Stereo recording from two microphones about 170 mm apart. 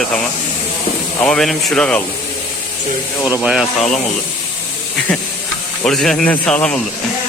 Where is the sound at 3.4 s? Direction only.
5° right (ahead or behind).